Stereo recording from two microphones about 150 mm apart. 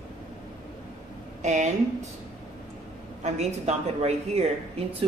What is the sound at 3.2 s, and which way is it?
Speech, 45° right (ahead or behind).